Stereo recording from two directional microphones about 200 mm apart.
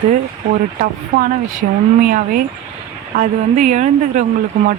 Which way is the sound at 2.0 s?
45° right (ahead or behind).